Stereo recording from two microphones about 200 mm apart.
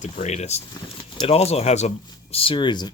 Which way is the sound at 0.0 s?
35° left (ahead or behind).